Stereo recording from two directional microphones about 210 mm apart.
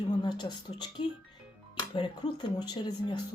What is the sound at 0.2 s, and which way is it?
Speech, 20° left (ahead or behind).